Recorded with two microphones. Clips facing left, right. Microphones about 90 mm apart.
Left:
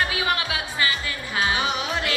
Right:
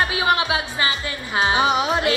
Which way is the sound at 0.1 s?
25° right (ahead or behind).